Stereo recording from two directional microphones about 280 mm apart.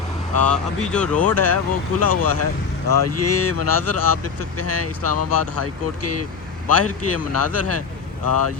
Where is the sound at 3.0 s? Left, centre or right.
Left.